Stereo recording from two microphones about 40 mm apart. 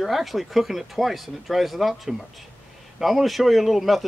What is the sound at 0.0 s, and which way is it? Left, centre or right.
A man's voice, centre.